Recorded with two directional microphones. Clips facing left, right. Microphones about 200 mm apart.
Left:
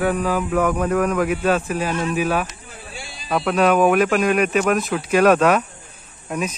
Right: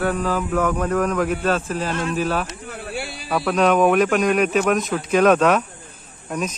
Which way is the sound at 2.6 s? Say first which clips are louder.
Right 8 dB; 60° right (ahead or behind).